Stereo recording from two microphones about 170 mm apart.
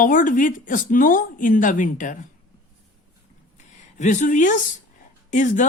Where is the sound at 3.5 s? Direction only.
45° left (ahead or behind).